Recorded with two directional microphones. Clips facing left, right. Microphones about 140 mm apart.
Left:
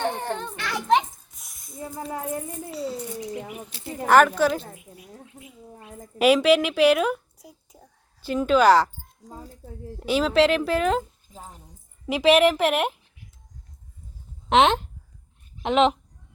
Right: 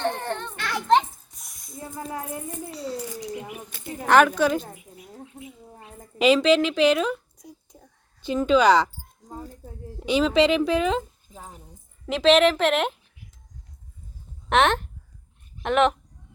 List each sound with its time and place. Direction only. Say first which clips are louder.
0.0 s a sound: even; 10° left (ahead or behind)
4.0 s speech: left 1 dB; 5° left (ahead or behind)
4.7 s a sound: right 1 dB; 20° right (ahead or behind)
6.1 s a woman's voice: even; 10° left (ahead or behind)
10.0 s speech: even; 5° left (ahead or behind)
12.0 s a woman's voice: even; 10° left (ahead or behind)
14.5 s a woman's voice: left 2 dB; 15° left (ahead or behind)